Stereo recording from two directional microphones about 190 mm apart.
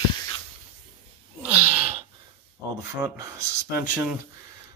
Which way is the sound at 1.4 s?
5° right (ahead or behind).